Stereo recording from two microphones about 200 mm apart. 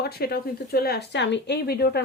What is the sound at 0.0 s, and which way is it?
Speech, 50° left (ahead or behind).